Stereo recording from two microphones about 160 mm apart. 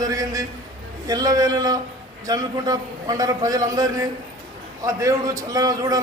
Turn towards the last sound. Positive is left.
turn(degrees=-25)  # may be behind; listen again after turning